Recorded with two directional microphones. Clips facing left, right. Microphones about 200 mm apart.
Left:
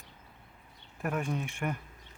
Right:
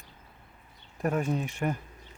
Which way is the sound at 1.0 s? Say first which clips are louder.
Right 5 dB; 35° right (ahead or behind).